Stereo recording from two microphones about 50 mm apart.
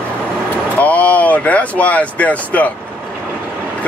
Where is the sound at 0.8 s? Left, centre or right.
Left.